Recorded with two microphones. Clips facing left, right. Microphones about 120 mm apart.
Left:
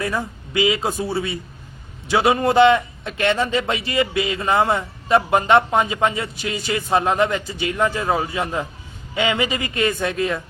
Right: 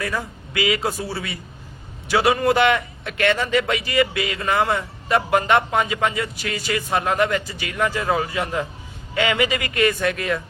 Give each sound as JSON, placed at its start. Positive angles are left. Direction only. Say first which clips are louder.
{"t": 0.0, "sound": "a man's voice", "louder": "left 2 dB", "side_deg": 25}